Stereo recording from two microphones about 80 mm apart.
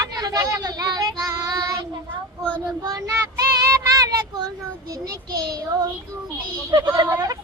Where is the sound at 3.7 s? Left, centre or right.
Right.